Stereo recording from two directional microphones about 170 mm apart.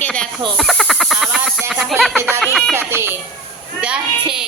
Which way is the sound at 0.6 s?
Centre (ahead or behind).